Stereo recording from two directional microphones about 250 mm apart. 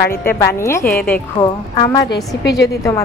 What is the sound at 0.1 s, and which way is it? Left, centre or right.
A woman's voice, centre.